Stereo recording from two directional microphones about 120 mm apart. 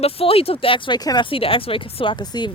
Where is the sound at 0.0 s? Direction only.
55° left (ahead or behind).